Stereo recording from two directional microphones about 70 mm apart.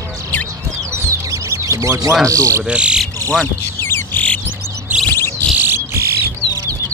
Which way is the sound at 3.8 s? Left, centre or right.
Left.